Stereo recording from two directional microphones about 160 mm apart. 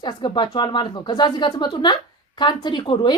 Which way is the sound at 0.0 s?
30° left (ahead or behind).